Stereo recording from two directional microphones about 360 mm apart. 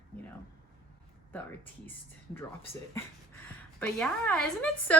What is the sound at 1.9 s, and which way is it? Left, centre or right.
Speech, centre.